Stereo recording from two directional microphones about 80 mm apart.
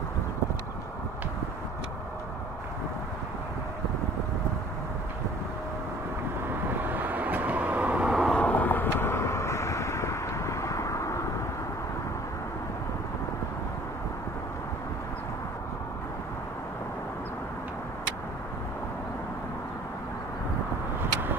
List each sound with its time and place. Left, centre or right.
6.8 s vehicle: right
8.3 s vehicle: centre; by 11.1 s left
21.0 s vehicle: right